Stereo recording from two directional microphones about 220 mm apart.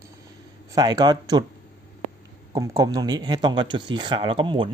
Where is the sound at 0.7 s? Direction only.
20° right (ahead or behind).